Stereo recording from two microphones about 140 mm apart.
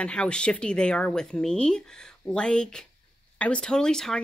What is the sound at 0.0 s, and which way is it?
Speech, 5° left (ahead or behind).